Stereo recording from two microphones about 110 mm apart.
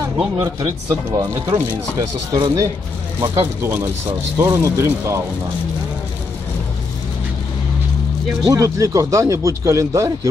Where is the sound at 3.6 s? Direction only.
20° right (ahead or behind).